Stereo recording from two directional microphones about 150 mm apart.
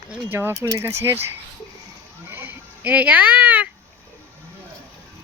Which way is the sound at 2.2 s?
15° right (ahead or behind).